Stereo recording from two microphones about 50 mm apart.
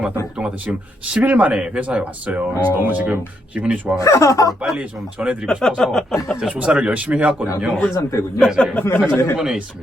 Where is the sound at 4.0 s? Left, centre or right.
Left.